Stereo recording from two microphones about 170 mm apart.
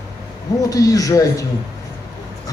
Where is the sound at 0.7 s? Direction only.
20° left (ahead or behind).